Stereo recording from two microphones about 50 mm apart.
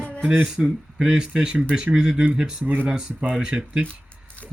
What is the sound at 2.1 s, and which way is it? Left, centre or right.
Speech, right.